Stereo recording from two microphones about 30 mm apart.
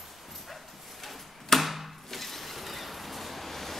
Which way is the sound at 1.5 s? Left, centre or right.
Centre.